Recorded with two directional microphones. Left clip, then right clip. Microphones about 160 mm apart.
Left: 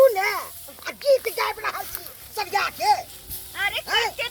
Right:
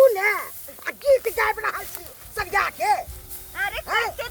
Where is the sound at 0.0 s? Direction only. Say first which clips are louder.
Right 1 dB; 25° right (ahead or behind).